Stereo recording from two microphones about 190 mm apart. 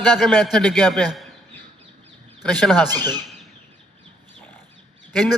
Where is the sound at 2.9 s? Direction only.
20° right (ahead or behind).